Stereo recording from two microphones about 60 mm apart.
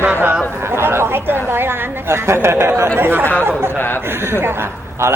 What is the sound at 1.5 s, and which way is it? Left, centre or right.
A man's voice, right.